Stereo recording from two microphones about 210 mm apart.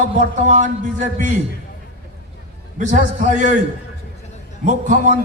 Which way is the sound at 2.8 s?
35° right (ahead or behind).